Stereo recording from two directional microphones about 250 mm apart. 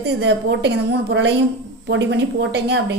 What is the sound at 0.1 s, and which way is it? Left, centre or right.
A woman's voice, right.